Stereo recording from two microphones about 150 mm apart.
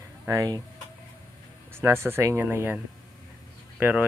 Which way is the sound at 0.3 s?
20° right (ahead or behind).